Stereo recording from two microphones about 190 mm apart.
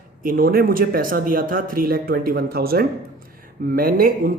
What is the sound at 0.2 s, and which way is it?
Speech, 50° right (ahead or behind).